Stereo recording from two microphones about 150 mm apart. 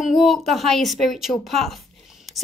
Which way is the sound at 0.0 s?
Centre (ahead or behind).